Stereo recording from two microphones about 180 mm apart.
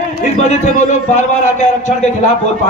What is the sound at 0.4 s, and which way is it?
Speech, 40° left (ahead or behind).